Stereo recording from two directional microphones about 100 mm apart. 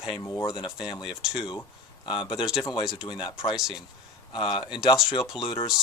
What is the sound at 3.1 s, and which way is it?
Speech, 50° left (ahead or behind).